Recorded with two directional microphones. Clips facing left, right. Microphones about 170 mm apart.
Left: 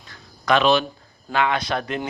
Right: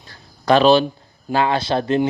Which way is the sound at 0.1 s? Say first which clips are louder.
Right 4 dB; 35° right (ahead or behind).